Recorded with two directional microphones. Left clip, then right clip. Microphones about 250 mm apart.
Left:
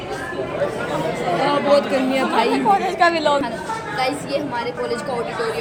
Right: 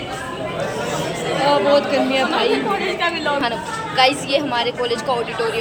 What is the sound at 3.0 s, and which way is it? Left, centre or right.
Speech, centre.